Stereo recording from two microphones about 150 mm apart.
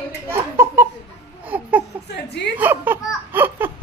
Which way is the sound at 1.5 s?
10° right (ahead or behind).